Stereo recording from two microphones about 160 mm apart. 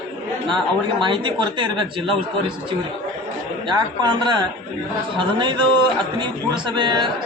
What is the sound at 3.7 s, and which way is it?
A man's voice, 30° right (ahead or behind).